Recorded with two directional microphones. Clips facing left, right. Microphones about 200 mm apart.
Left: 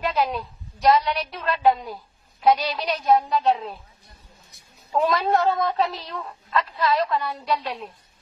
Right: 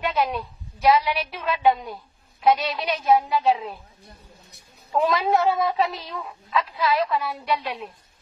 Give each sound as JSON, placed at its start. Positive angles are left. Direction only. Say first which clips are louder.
{"t": 0.0, "sound": "a woman's voice", "louder": "even", "side_deg": 0}
{"t": 4.0, "sound": "a sound", "louder": "right 5 dB", "side_deg": -60}
{"t": 4.9, "sound": "a woman's voice", "louder": "even", "side_deg": 0}